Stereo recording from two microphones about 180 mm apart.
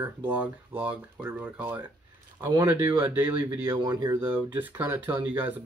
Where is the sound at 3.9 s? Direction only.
25° right (ahead or behind).